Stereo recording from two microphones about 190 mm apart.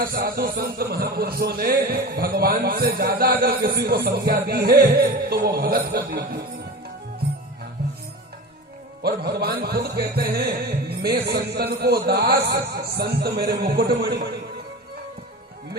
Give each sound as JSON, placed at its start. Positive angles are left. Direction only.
{"t": 0.0, "sound": "a man's voice", "side_deg": -55}
{"t": 6.1, "sound": "music", "side_deg": -55}
{"t": 9.0, "sound": "music", "side_deg": -55}